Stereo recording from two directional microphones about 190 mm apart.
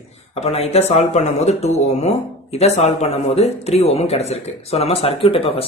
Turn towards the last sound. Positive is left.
turn(degrees=30)  # may be behind; listen again after turning